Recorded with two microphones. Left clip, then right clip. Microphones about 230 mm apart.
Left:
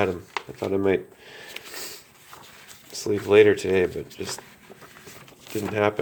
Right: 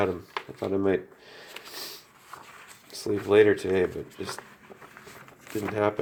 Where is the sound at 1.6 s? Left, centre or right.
Centre.